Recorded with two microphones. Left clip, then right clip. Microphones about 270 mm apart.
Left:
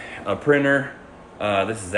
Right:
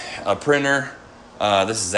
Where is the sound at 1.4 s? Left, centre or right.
Centre.